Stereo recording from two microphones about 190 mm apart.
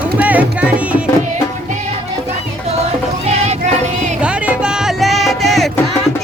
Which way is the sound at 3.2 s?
35° right (ahead or behind).